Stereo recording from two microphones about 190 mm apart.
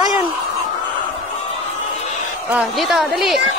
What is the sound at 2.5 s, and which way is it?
Speech, centre (ahead or behind).